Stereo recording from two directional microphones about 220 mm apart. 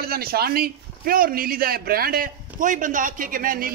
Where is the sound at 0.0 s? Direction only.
45° right (ahead or behind).